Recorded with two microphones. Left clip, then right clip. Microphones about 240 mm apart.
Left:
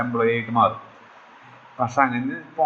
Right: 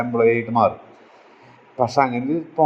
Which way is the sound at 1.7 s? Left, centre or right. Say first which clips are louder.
Right 2 dB; right.